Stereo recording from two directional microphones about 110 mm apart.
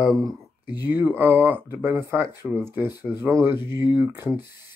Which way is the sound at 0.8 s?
15° right (ahead or behind).